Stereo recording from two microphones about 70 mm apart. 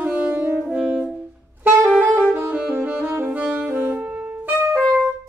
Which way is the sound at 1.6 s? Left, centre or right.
Right.